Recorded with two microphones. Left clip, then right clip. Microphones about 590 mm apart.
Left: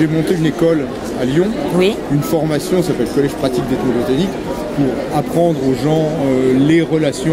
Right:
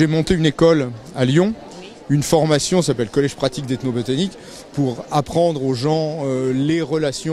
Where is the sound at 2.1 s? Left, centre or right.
Right.